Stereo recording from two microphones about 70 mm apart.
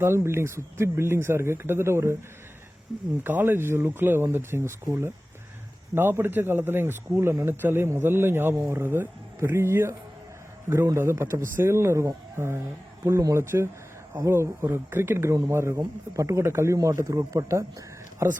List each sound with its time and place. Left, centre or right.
0.0 s a man's voice: right
3.2 s a man's voice: right
10.9 s a man's voice: right